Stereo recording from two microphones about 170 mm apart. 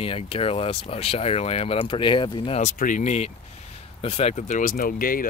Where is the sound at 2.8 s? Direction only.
45° left (ahead or behind).